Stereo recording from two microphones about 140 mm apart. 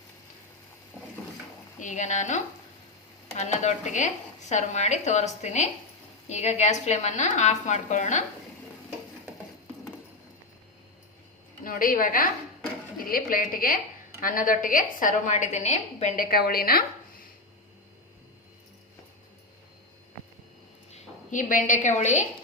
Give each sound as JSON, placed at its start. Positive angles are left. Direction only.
{"t": 1.8, "sound": "a woman's voice", "side_deg": 60}
{"t": 11.6, "sound": "a woman's voice", "side_deg": 85}
{"t": 20.9, "sound": "a woman's voice", "side_deg": 65}